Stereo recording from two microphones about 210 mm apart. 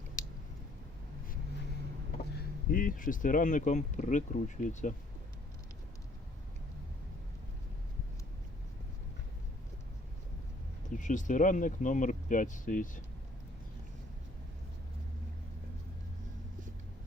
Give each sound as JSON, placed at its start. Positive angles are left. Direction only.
{"t": 2.6, "sound": "speech", "side_deg": 45}
{"t": 10.9, "sound": "speech", "side_deg": 35}